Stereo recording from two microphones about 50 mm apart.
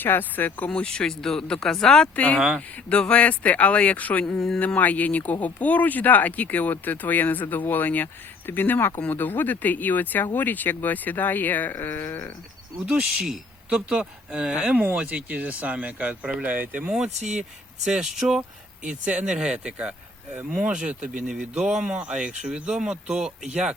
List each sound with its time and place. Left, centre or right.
0.0 s speech: left
0.9 s speech: centre
2.1 s speech: left
4.4 s speech: centre
4.6 s speech: left
12.8 s speech: right
13.2 s speech: centre; by 16.8 s right
16.8 s speech: centre
18.9 s speech: right
20.3 s speech: right
20.6 s speech: centre